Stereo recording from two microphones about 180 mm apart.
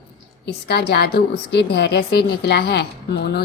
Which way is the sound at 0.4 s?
65° left (ahead or behind).